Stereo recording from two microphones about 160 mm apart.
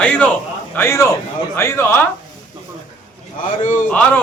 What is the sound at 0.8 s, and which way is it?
Speech, 15° left (ahead or behind).